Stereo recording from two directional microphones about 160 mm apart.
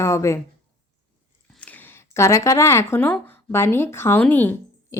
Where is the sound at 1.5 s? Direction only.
10° left (ahead or behind).